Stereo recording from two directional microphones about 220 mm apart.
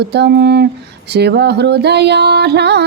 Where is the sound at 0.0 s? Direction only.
50° right (ahead or behind).